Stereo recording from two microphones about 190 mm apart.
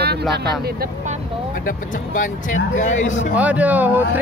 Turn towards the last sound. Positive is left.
turn(degrees=-10)  # may be behind; listen again after turning